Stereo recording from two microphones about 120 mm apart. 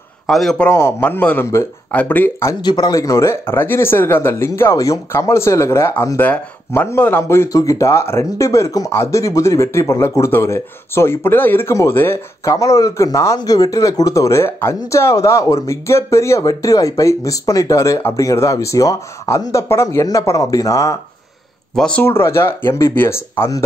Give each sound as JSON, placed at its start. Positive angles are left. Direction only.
{"t": 0.3, "sound": "a man's voice", "side_deg": 0}
{"t": 0.7, "sound": "speech", "side_deg": 20}
{"t": 2.6, "sound": "speech", "side_deg": 35}
{"t": 21.7, "sound": "speech", "side_deg": 5}
{"t": 22.0, "sound": "speech", "side_deg": 20}